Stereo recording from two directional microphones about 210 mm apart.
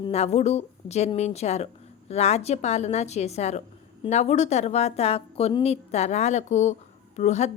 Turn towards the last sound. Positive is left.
turn(degrees=30)  # may be behind; listen again after turning